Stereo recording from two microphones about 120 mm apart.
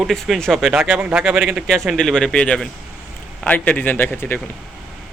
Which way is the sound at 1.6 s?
Centre (ahead or behind).